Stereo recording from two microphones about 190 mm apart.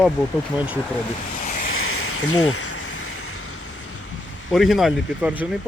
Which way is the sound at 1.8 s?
90° left.